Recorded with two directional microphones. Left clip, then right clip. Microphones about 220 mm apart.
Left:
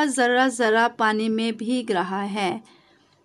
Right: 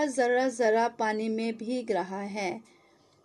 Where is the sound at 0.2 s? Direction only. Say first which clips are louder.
Left 5 dB; 25° left (ahead or behind).